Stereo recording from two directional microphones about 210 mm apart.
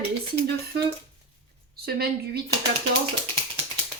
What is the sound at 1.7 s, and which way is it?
Speech, 50° right (ahead or behind).